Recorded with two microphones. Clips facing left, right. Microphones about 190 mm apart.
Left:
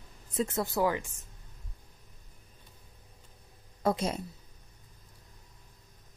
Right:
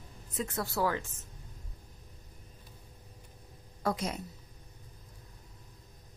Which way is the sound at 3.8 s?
25° left (ahead or behind).